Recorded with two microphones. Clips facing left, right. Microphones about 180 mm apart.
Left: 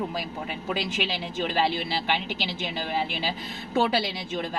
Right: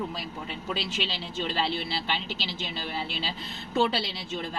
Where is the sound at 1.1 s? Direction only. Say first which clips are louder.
Left 4 dB; 60° left (ahead or behind).